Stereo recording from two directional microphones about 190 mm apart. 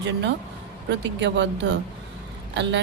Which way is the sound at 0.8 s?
70° right (ahead or behind).